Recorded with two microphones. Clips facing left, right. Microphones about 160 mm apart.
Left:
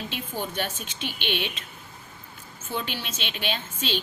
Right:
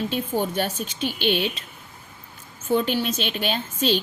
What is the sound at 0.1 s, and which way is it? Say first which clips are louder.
A woman's voice: right 8 dB; 45° right (ahead or behind).